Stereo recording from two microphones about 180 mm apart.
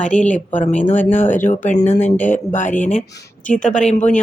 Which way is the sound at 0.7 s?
40° left (ahead or behind).